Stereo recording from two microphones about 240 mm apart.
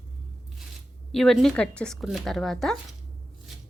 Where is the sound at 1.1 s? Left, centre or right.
Centre.